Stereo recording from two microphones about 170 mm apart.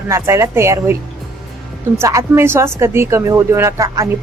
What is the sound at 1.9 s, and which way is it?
Speech, 15° right (ahead or behind).